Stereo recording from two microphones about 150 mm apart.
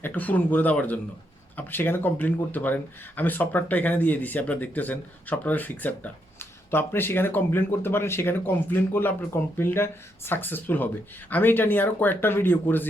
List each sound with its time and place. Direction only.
0.0 s speech: 10° left (ahead or behind)